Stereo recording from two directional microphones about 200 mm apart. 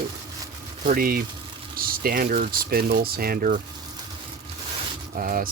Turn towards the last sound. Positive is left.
turn(degrees=-45)  # may be behind; listen again after turning